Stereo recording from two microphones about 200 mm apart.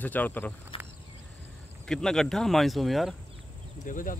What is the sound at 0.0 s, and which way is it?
Speech, 10° left (ahead or behind).